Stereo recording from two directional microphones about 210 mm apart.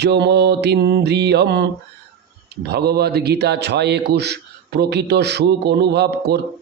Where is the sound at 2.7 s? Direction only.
50° right (ahead or behind).